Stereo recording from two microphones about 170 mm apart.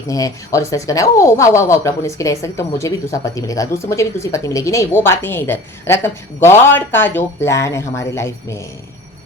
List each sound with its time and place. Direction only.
0.1 s speech: 20° left (ahead or behind)